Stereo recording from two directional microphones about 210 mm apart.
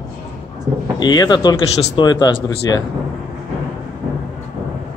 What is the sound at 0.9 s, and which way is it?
Speech, 20° left (ahead or behind).